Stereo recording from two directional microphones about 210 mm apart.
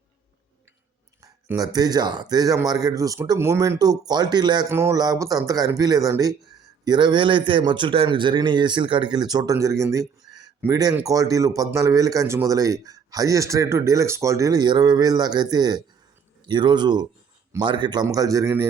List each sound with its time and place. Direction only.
1.2 s speech: 15° right (ahead or behind)